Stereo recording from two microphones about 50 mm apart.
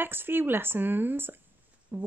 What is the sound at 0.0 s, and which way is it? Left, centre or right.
A woman's voice, right.